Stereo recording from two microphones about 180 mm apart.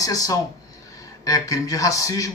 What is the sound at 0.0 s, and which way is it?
Speech, 20° left (ahead or behind).